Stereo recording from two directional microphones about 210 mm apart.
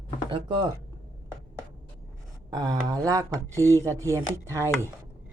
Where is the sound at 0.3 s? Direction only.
20° right (ahead or behind).